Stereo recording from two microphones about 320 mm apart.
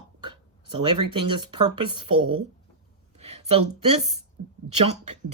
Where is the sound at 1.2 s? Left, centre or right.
Right.